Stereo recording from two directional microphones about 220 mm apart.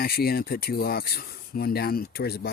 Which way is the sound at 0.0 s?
45° left (ahead or behind).